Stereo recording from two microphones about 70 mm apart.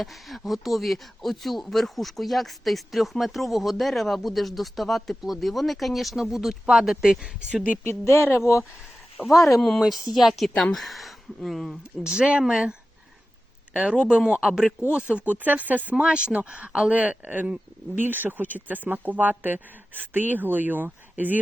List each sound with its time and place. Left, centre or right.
0.0 s speech: centre
7.9 s speech: left
9.2 s speech: centre
9.6 s speech: centre
12.1 s speech: centre
13.7 s speech: centre